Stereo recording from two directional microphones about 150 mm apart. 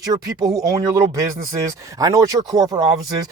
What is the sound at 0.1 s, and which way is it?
Speech, 30° right (ahead or behind).